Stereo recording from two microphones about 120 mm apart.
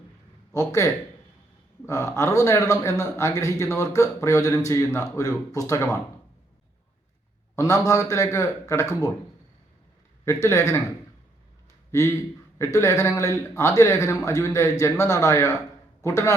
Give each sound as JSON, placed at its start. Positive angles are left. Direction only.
{"t": 0.5, "sound": "speech", "side_deg": 25}
{"t": 1.9, "sound": "speech", "side_deg": 25}
{"t": 7.5, "sound": "speech", "side_deg": 25}
{"t": 10.2, "sound": "speech", "side_deg": 25}
{"t": 11.9, "sound": "speech", "side_deg": 25}